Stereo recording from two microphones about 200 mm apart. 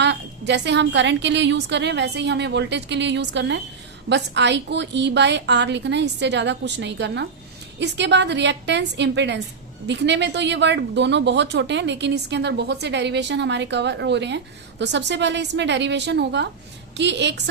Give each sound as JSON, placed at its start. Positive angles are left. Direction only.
{"t": 0.0, "sound": "speech", "side_deg": -60}